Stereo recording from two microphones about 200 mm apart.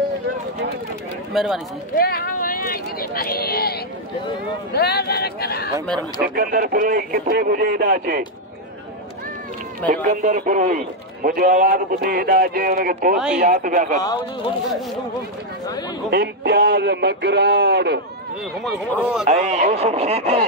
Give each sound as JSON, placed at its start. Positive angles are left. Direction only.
{"t": 1.3, "sound": "speech", "side_deg": 0}
{"t": 2.0, "sound": "speech", "side_deg": 50}
{"t": 6.2, "sound": "a man's voice", "side_deg": -50}
{"t": 9.8, "sound": "a man's voice", "side_deg": -40}
{"t": 14.0, "sound": "speech", "side_deg": 20}
{"t": 16.1, "sound": "speech", "side_deg": -55}
{"t": 18.6, "sound": "speech", "side_deg": 0}
{"t": 19.2, "sound": "speech", "side_deg": -35}